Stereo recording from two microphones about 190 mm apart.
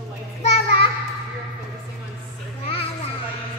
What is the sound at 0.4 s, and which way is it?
Child singing, 30° left (ahead or behind).